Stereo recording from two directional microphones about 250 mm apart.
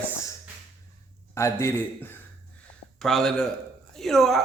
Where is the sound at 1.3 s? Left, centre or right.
Centre.